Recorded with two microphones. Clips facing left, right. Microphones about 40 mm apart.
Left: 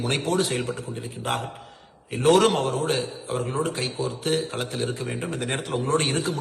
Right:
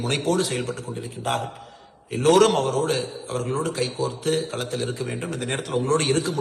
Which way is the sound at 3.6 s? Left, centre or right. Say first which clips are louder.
Right 2 dB; left.